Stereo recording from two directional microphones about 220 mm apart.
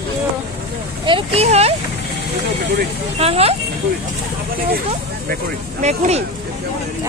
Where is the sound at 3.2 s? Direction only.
25° right (ahead or behind).